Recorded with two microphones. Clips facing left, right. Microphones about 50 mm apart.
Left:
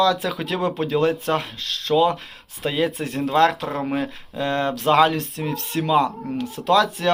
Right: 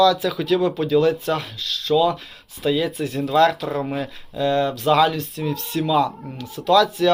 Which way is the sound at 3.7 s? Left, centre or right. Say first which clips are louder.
Even; left.